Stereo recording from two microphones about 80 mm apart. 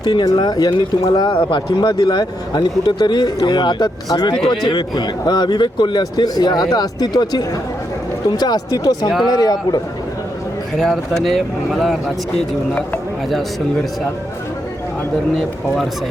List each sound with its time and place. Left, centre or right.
0.0 s speech: left
10.8 s speech: centre
15.4 s speech: centre